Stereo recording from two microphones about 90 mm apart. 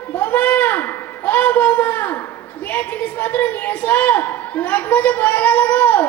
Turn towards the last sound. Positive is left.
turn(degrees=20)  # may be behind; listen again after turning